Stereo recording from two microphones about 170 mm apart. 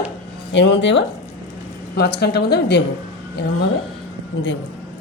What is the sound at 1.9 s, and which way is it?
Speech, 75° left (ahead or behind).